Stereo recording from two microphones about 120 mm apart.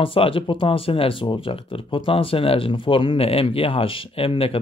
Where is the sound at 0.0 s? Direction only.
50° left (ahead or behind).